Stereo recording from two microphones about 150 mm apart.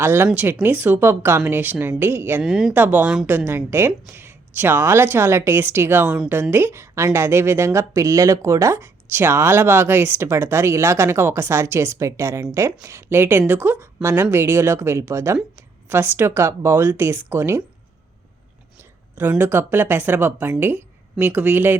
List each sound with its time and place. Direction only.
0.0 s a woman's voice: 15° right (ahead or behind)
2.4 s speech: centre (ahead or behind)
2.7 s a woman's voice: 10° right (ahead or behind)
18.8 s speech: 10° right (ahead or behind)